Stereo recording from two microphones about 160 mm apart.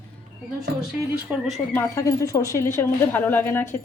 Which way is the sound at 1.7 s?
20° left (ahead or behind).